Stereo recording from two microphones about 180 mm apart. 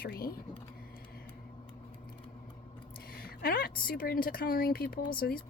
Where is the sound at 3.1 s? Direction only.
55° left (ahead or behind).